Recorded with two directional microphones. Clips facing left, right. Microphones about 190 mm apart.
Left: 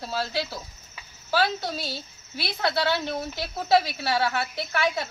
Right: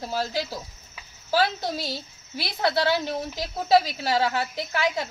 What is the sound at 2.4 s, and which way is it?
Speech, 45° right (ahead or behind).